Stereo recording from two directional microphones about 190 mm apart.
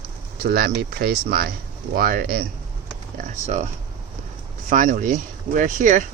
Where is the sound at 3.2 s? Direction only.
40° right (ahead or behind).